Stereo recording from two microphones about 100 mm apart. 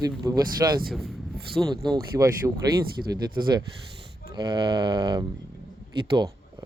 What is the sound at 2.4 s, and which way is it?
Speech, 25° right (ahead or behind).